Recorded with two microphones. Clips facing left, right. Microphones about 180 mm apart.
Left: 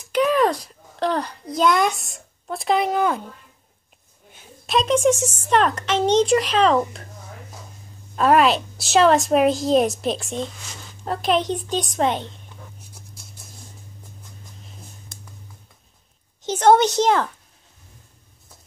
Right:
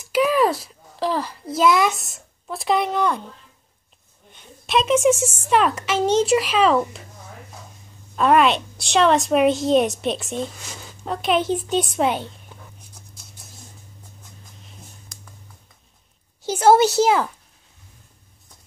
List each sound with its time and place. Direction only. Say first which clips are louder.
0.1 s a child's voice: even; 5° right (ahead or behind)
4.3 s a woman's voice: right 1 dB; 5° left (ahead or behind)
8.2 s a woman's voice: even; centre (ahead or behind)
16.4 s a woman's voice: right 1 dB; 5° right (ahead or behind)